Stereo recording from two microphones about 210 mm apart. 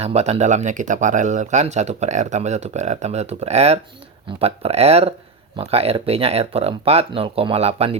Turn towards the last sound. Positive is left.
turn(degrees=-30)  # may be behind; listen again after turning